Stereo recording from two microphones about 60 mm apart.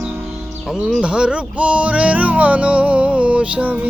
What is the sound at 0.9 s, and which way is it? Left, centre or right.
Music, centre.